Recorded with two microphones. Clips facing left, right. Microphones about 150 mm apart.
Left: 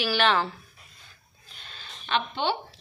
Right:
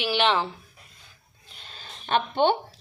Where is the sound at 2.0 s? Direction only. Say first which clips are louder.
Right 5 dB; 50° right (ahead or behind).